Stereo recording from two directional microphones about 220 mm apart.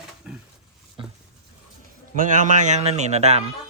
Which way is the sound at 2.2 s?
35° right (ahead or behind).